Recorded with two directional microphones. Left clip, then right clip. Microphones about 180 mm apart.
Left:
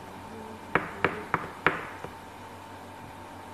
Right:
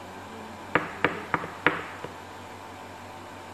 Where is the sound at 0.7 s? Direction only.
40° left (ahead or behind).